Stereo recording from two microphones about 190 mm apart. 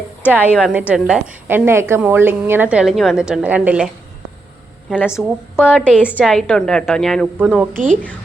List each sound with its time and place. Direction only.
0.3 s a woman's voice: 10° right (ahead or behind)
4.9 s a woman's voice: 10° left (ahead or behind); by 7.7 s 5° right (ahead or behind)
7.7 s a woman's voice: 45° right (ahead or behind)